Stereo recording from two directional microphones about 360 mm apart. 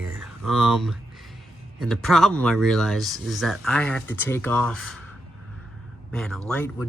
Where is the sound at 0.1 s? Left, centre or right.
Centre.